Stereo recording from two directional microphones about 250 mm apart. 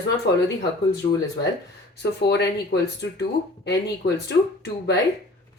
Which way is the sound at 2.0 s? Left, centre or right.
Left.